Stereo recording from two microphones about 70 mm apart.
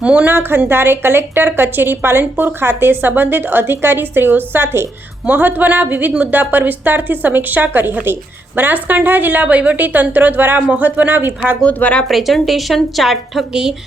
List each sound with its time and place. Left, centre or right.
0.0 s a woman's voice: centre
0.3 s a woman's voice: right
11.6 s speech: left
12.0 s a woman's voice: centre